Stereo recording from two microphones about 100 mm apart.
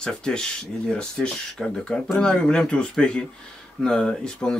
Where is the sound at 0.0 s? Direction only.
5° left (ahead or behind).